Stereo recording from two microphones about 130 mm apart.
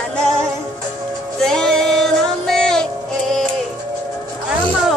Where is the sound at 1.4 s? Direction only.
5° left (ahead or behind).